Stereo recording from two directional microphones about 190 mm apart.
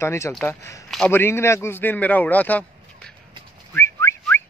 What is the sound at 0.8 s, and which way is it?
A man's voice, 5° left (ahead or behind).